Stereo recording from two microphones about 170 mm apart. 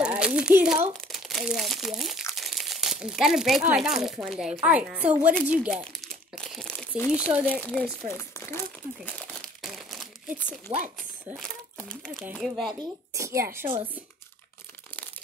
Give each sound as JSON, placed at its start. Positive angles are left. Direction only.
{"t": 0.0, "sound": "crumpling", "side_deg": -5}
{"t": 1.0, "sound": "a woman's voice", "side_deg": 0}
{"t": 5.5, "sound": "crumpling", "side_deg": -10}
{"t": 7.1, "sound": "speech", "side_deg": -5}
{"t": 8.2, "sound": "speech", "side_deg": 15}
{"t": 9.6, "sound": "crumpling", "side_deg": 0}
{"t": 10.7, "sound": "speech", "side_deg": -30}
{"t": 11.2, "sound": "speech", "side_deg": 0}
{"t": 13.1, "sound": "a woman's voice", "side_deg": -15}